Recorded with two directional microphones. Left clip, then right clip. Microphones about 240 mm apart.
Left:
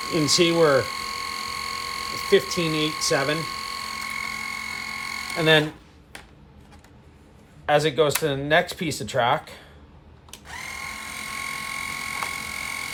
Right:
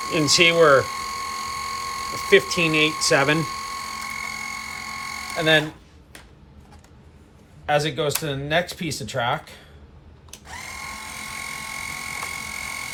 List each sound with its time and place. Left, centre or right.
0.3 s speech: centre
0.8 s hum: centre
2.5 s speech: centre
2.9 s a sound: centre
7.6 s speech: left
10.3 s ratchet: centre